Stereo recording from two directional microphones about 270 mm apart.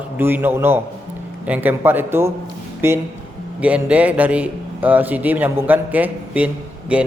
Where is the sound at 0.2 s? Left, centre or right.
Centre.